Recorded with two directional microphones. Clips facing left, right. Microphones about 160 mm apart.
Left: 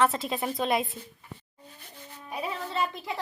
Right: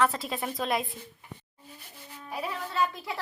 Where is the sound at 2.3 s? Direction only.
25° left (ahead or behind).